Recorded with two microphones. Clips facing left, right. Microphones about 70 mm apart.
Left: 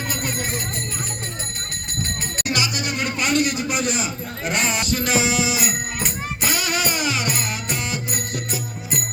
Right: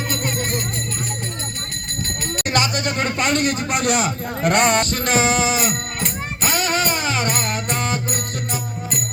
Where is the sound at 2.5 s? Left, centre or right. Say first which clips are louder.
Right 4 dB; right.